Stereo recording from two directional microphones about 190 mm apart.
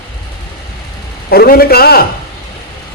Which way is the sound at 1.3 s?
50° left (ahead or behind).